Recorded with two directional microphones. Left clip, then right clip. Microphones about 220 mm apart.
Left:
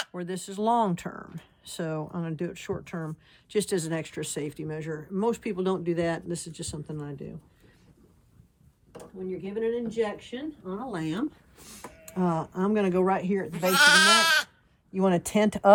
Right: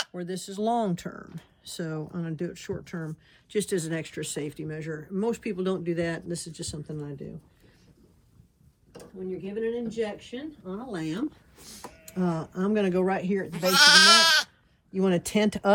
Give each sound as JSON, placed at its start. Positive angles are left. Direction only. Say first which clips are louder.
{"t": 0.2, "sound": "speech", "louder": "even", "side_deg": 35}
{"t": 6.2, "sound": "speech", "louder": "even", "side_deg": 25}
{"t": 9.5, "sound": "speech", "louder": "left 2 dB", "side_deg": 10}
{"t": 10.9, "sound": "speech", "louder": "right 1 dB", "side_deg": 25}
{"t": 13.5, "sound": "goat", "louder": "right 2 dB", "side_deg": 0}
{"t": 14.9, "sound": "speech", "louder": "left 1 dB", "side_deg": 30}